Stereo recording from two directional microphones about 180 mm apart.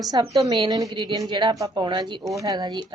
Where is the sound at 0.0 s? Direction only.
20° right (ahead or behind).